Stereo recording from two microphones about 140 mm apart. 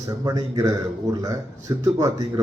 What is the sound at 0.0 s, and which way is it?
Speech, 25° right (ahead or behind).